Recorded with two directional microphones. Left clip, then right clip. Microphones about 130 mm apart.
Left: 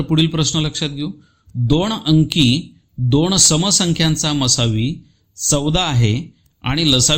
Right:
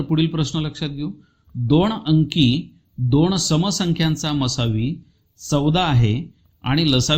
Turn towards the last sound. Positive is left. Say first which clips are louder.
# left 4 dB
turn(degrees=15)  # may be behind; listen again after turning